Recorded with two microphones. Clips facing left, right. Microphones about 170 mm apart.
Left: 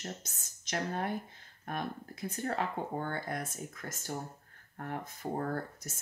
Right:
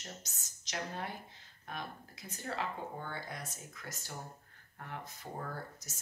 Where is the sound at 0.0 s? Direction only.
55° left (ahead or behind).